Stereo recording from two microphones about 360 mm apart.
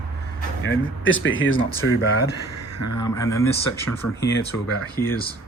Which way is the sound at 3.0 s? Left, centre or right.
Centre.